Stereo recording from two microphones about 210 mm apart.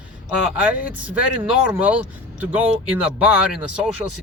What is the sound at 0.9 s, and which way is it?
Speech, 5° right (ahead or behind).